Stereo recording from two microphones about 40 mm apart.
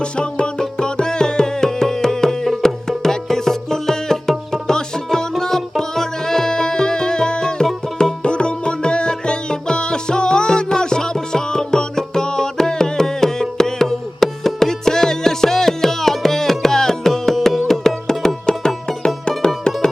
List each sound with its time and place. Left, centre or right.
0.0 s music: left